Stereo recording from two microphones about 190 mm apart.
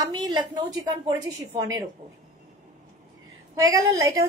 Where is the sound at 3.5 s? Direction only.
15° right (ahead or behind).